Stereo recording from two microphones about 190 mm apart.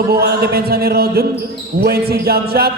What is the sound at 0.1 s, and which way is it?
A man's voice, 55° right (ahead or behind).